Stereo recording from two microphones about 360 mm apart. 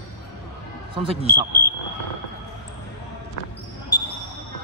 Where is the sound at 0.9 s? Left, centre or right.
Centre.